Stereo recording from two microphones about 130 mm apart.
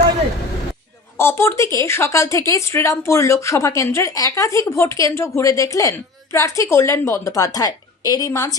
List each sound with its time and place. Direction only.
1.2 s a woman's voice: 20° left (ahead or behind)